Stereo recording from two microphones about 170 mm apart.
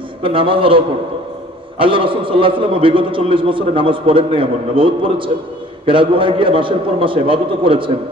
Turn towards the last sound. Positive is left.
turn(degrees=-30)  # may be behind; listen again after turning